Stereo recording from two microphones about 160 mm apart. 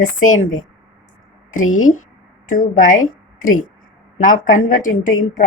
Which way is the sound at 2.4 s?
55° left (ahead or behind).